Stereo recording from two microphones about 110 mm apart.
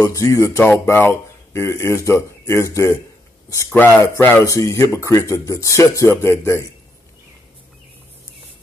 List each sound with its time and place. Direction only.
0.0 s speech: 30° left (ahead or behind)